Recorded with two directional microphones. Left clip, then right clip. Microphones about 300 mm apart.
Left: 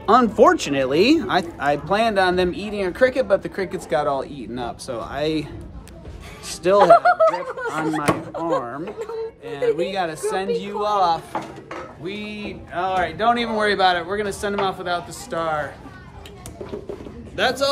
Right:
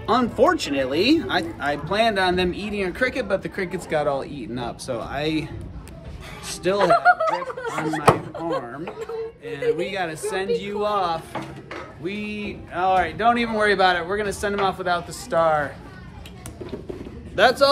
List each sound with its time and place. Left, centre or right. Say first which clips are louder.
0.0 s speech: left 5 dB; centre
6.8 s speech: left 4 dB; left
7.2 s speech: left 4 dB; centre
9.5 s speech: left 2 dB; centre
17.4 s speech: right 4 dB; centre